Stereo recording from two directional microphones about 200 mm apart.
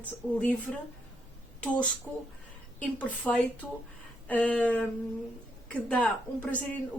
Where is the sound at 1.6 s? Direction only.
5° left (ahead or behind).